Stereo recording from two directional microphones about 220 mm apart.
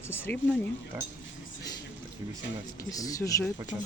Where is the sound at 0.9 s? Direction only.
10° right (ahead or behind).